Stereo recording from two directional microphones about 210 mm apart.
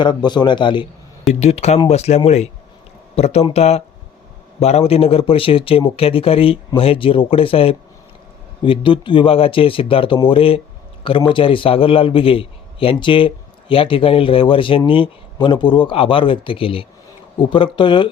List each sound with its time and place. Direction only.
0.0 s a man's voice: 20° left (ahead or behind)